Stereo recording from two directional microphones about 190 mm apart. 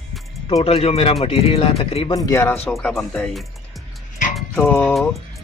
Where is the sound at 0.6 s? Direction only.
30° left (ahead or behind).